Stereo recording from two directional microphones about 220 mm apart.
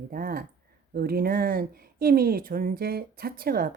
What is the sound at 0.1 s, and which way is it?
Speech, 40° right (ahead or behind).